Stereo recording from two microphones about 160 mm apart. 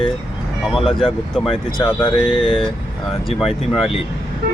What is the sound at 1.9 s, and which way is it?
Speech, 25° left (ahead or behind).